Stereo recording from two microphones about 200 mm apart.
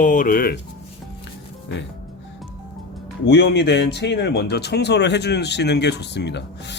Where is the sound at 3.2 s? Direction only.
55° left (ahead or behind).